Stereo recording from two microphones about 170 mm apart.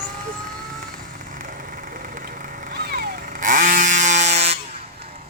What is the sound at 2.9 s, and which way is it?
Vehicle, 55° right (ahead or behind).